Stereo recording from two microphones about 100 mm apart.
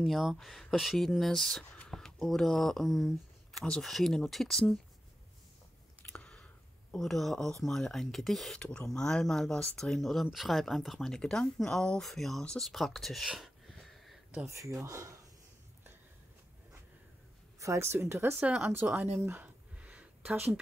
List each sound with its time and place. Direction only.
0.0 s speech: centre (ahead or behind)
6.1 s speech: 10° left (ahead or behind)
14.4 s speech: 30° right (ahead or behind)
17.6 s speech: 30° right (ahead or behind)
18.4 s speech: 10° right (ahead or behind)
18.7 s speech: 20° right (ahead or behind)
19.2 s a sound: 20° right (ahead or behind)